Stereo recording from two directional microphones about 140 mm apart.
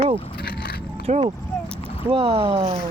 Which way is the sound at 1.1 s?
55° right (ahead or behind).